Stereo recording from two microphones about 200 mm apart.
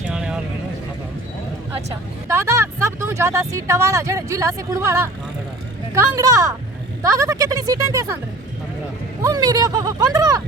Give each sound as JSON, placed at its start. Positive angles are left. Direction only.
{"t": 0.1, "sound": "a sound", "side_deg": -5}
{"t": 2.2, "sound": "speech", "side_deg": -15}
{"t": 9.2, "sound": "speech", "side_deg": -20}